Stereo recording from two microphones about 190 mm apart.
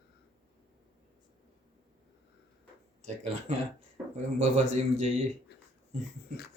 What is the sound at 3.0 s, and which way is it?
Speech, 35° right (ahead or behind).